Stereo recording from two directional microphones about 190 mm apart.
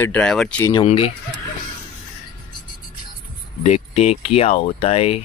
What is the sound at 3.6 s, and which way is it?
Speech, 35° left (ahead or behind).